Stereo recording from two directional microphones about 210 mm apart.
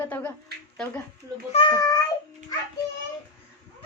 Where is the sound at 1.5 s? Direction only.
25° left (ahead or behind).